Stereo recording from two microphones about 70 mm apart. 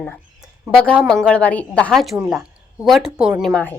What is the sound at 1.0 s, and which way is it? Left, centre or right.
Speech, centre.